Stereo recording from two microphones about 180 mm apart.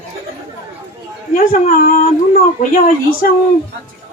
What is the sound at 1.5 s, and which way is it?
Speech, 55° left (ahead or behind).